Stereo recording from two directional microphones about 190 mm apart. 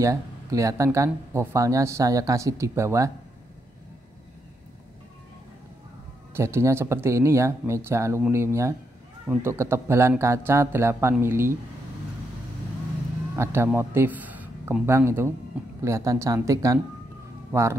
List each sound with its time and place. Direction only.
0.0 s speech: 15° right (ahead or behind)
6.3 s speech: 15° right (ahead or behind)
13.4 s a man's voice: 10° right (ahead or behind)